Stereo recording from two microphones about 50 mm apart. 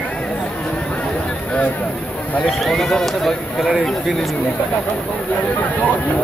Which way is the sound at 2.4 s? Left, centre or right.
Centre.